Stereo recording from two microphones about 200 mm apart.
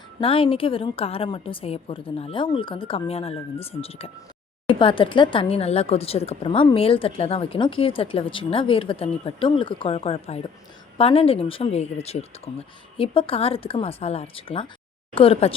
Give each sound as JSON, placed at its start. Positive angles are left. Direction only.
{"t": 0.2, "sound": "speech", "side_deg": 25}